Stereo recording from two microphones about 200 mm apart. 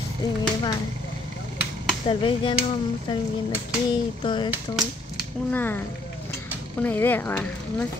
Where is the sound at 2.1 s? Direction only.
25° left (ahead or behind).